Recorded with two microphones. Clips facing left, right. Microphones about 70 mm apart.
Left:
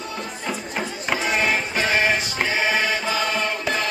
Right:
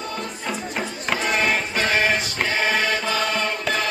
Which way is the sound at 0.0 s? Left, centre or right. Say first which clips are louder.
Right 1 dB; centre.